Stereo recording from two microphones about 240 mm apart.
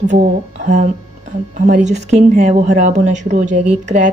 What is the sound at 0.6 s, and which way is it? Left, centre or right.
A woman's voice, right.